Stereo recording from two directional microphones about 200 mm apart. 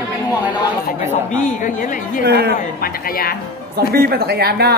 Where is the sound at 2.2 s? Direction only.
50° right (ahead or behind).